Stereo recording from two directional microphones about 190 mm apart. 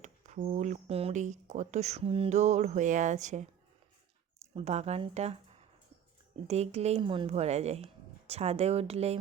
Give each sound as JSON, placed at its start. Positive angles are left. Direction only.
{"t": 0.0, "sound": "speech", "side_deg": -40}
{"t": 4.5, "sound": "speech", "side_deg": -35}